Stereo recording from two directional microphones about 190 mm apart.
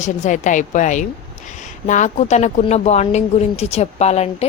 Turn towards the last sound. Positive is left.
turn(degrees=35)  # may be behind; listen again after turning